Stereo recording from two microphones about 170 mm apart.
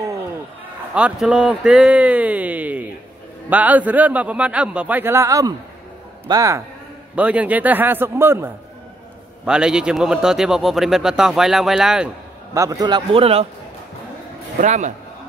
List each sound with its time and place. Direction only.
0.9 s a man's voice: 5° right (ahead or behind)
7.2 s a man's voice: 10° right (ahead or behind)
12.5 s a man's voice: 20° right (ahead or behind)
14.6 s a man's voice: 45° right (ahead or behind)